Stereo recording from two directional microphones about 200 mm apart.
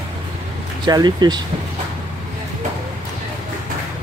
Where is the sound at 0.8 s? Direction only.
20° right (ahead or behind).